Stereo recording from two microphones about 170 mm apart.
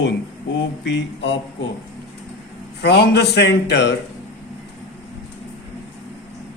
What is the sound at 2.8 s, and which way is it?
Speech, 80° left.